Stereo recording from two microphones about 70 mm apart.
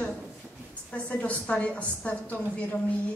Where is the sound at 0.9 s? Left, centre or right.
Left.